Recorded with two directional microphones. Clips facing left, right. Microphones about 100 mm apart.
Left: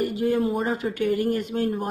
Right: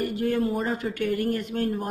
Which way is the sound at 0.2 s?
5° left (ahead or behind).